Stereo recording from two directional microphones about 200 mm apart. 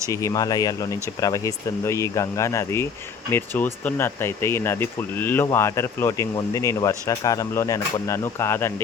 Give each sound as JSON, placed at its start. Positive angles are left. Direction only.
{"t": 0.1, "sound": "speech", "side_deg": 15}